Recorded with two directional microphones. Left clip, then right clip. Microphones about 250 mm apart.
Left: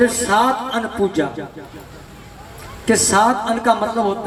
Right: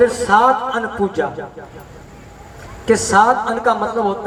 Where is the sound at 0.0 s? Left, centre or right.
Left.